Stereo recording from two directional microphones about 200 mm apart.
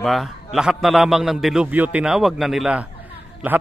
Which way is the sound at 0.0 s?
Centre (ahead or behind).